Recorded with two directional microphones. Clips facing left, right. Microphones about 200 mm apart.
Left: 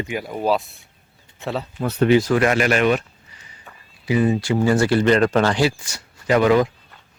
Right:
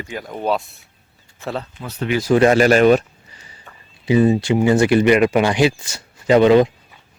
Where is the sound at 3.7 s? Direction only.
Centre (ahead or behind).